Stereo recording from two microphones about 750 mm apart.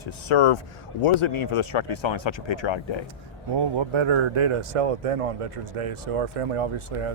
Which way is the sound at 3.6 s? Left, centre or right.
Right.